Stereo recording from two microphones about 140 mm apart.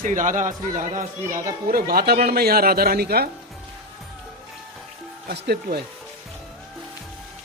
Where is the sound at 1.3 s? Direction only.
80° right.